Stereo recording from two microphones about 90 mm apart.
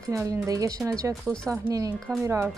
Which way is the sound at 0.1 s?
40° right (ahead or behind).